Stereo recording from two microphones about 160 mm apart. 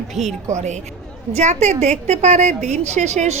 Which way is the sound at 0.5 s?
45° right (ahead or behind).